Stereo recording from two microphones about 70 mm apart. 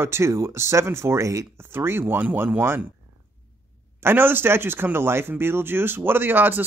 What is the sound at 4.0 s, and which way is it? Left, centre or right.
Speech, right.